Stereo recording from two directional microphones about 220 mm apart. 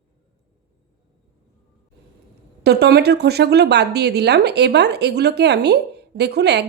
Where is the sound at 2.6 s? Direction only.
45° right (ahead or behind).